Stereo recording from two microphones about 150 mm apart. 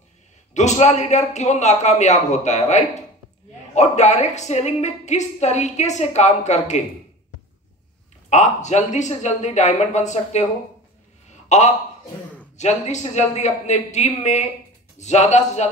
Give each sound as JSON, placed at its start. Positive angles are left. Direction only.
{"t": 0.6, "sound": "a woman's voice", "side_deg": 50}
{"t": 8.3, "sound": "a woman's voice", "side_deg": 50}
{"t": 11.2, "sound": "a sound", "side_deg": 50}
{"t": 12.5, "sound": "a woman's voice", "side_deg": 50}